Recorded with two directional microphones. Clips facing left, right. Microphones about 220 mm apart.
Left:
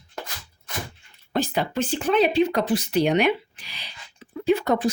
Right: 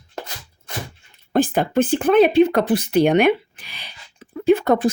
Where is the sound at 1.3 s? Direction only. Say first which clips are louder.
Right 7 dB; 50° right (ahead or behind).